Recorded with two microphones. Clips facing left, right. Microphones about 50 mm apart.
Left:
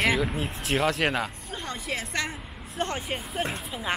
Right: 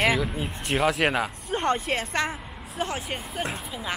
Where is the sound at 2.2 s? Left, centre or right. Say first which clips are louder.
Right 3 dB; right.